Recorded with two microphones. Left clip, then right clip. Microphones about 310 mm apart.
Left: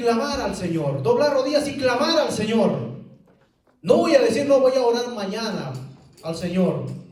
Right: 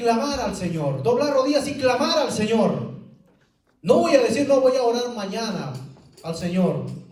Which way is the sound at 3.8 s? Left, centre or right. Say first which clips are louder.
Left 1 dB; centre.